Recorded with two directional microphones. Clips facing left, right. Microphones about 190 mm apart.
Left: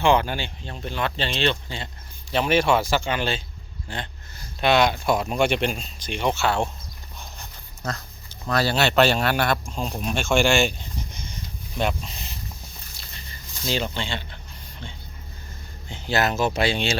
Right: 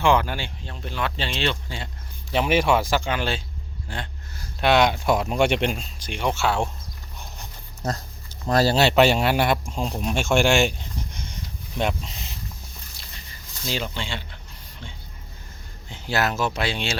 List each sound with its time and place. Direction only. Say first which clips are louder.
0.0 s speech: left 1 dB; 5° right (ahead or behind)
6.4 s speech: right 1 dB; centre (ahead or behind)
7.8 s speech: right 3 dB; 25° right (ahead or behind)
8.4 s speech: right 3 dB; 40° right (ahead or behind)
9.0 s speech: left 1 dB; 15° right (ahead or behind)
10.3 s speech: even; 5° right (ahead or behind)
11.8 s speech: even; 20° right (ahead or behind)
13.7 s speech: left 2 dB; 5° right (ahead or behind)
15.9 s speech: left 1 dB; 5° right (ahead or behind)